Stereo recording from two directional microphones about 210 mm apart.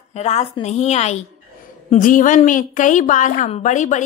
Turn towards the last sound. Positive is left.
turn(degrees=35)  # may be behind; listen again after turning